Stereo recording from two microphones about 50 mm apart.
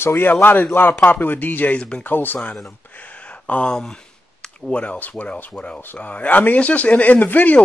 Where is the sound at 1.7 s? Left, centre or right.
Left.